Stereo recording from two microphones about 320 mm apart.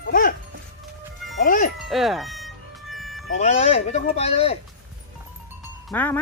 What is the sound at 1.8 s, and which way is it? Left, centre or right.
Speech, centre.